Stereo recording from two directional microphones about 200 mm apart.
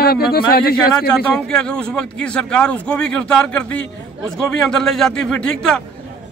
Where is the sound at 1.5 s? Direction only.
5° left (ahead or behind).